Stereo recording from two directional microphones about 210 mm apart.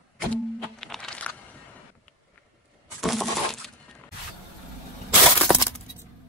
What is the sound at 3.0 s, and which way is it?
Coin, centre (ahead or behind).